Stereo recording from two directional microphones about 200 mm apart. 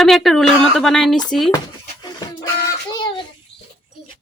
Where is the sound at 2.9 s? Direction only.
25° left (ahead or behind).